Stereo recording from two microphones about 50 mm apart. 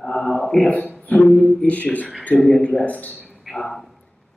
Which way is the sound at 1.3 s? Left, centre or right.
Centre.